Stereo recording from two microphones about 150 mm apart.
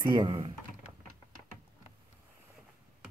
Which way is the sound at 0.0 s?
30° right (ahead or behind).